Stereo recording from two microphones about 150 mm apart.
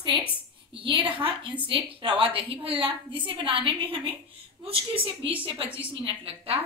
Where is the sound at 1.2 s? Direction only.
35° right (ahead or behind).